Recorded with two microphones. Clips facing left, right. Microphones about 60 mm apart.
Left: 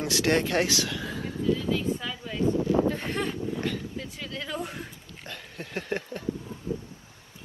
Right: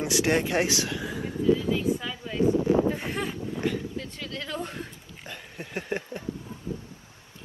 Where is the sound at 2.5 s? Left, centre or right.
Right.